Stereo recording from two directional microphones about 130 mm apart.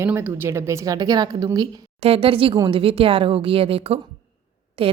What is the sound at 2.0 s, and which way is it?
A woman's voice, 45° right (ahead or behind).